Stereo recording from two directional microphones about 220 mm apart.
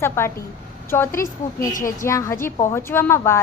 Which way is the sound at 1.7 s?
35° left (ahead or behind).